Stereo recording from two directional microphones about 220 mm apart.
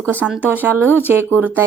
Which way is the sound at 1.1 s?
10° right (ahead or behind).